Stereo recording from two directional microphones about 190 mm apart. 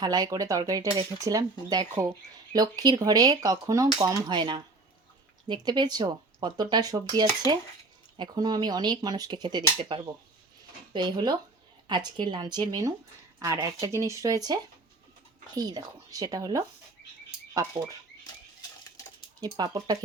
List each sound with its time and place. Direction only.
0.0 s speech: 20° right (ahead or behind)
10.9 s speech: 25° right (ahead or behind)
19.4 s speech: 20° right (ahead or behind)